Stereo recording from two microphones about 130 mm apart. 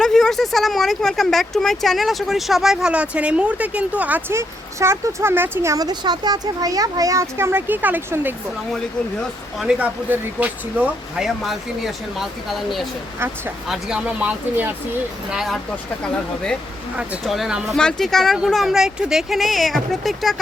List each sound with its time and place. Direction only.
0.0 s speech: 5° left (ahead or behind); by 8.4 s 15° right (ahead or behind)
9.6 s speech: 10° right (ahead or behind)
13.1 s speech: 20° right (ahead or behind)
13.7 s speech: 5° right (ahead or behind)
15.3 s speech: centre (ahead or behind)
17.0 s speech: 5° right (ahead or behind)